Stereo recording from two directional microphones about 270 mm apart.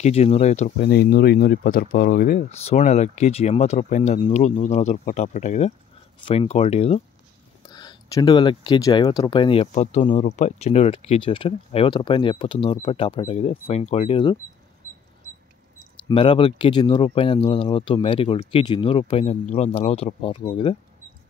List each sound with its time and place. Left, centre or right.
0.0 s speech: left
16.1 s speech: centre